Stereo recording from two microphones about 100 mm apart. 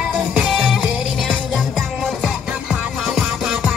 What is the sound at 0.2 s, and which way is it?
Music, 5° right (ahead or behind).